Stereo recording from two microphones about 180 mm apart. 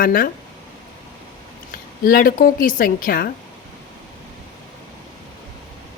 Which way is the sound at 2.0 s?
55° left (ahead or behind).